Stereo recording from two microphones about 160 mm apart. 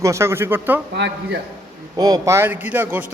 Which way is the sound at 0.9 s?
90° right.